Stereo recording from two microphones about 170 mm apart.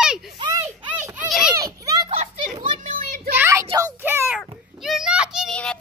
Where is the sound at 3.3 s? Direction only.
15° right (ahead or behind).